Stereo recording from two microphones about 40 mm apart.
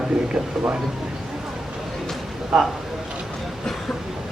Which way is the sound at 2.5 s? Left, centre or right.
Centre.